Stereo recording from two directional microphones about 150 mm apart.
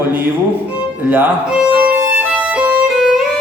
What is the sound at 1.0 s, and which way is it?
Violin, 10° right (ahead or behind).